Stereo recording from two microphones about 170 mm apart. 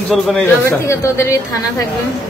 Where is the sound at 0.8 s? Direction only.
15° left (ahead or behind).